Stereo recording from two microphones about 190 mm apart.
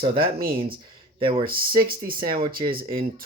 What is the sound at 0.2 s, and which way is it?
Speech, 50° right (ahead or behind).